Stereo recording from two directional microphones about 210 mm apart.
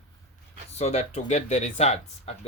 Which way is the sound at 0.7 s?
30° left (ahead or behind).